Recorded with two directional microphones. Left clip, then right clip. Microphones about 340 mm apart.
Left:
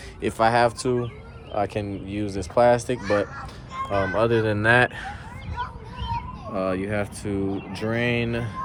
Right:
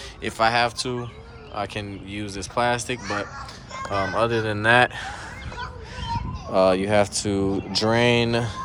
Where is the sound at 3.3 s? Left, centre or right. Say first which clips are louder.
Left 1 dB; left.